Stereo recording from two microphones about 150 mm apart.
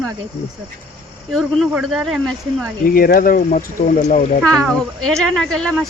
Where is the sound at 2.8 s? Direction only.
75° left (ahead or behind); by 4.2 s 60° left (ahead or behind).